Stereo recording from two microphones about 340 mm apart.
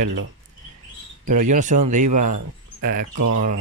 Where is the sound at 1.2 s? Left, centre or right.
Right.